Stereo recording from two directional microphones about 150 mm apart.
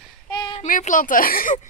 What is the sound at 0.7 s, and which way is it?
Speech, 60° left (ahead or behind).